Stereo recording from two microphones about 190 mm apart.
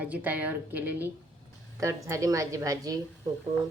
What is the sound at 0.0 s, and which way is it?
A woman's voice, 10° right (ahead or behind).